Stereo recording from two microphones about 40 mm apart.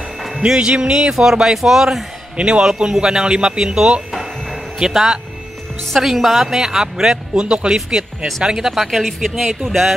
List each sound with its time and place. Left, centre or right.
0.7 s speech: right
1.1 s speech: centre
2.3 s speech: right
2.9 s speech: centre
4.1 s music: centre
5.9 s speech: centre; by 7.7 s right
8.5 s speech: centre